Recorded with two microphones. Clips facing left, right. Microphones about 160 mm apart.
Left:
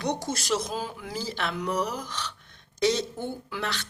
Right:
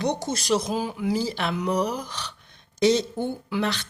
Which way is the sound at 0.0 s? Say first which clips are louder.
Right 3 dB; 20° right (ahead or behind).